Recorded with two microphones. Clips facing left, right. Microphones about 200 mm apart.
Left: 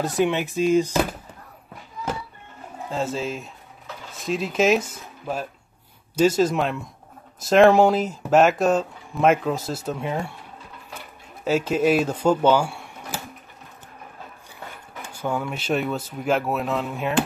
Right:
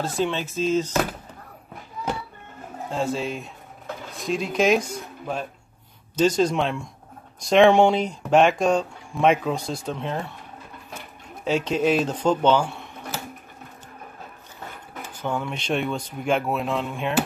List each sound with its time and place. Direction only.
0.0 s speech: 15° left (ahead or behind)
2.9 s speech: centre (ahead or behind)
11.4 s speech: 5° left (ahead or behind)
15.0 s speech: 10° left (ahead or behind)